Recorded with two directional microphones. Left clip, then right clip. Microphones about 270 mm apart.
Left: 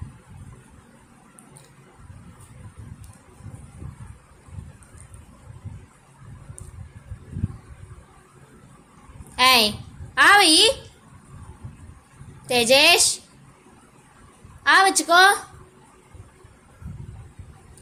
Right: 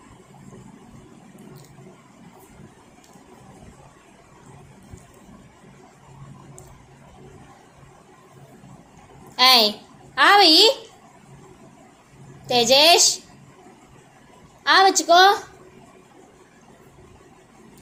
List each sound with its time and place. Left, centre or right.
9.3 s a woman's voice: left
12.5 s a woman's voice: left
14.6 s a woman's voice: left